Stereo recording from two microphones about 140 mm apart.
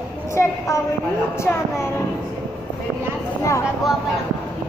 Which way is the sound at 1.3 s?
20° left (ahead or behind).